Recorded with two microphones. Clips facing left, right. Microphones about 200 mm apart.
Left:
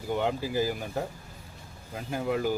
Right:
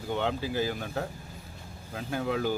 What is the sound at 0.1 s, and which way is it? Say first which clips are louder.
Speech: left 2 dB; 10° left (ahead or behind).